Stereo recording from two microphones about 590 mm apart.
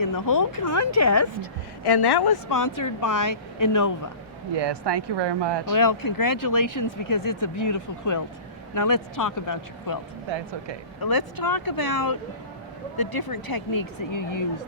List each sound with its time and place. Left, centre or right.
0.0 s speech: left
1.8 s speech: left
4.5 s speech: right
5.7 s speech: left
10.3 s speech: right
11.0 s speech: left